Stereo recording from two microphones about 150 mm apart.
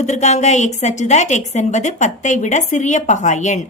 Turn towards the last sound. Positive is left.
turn(degrees=50)  # may be behind; listen again after turning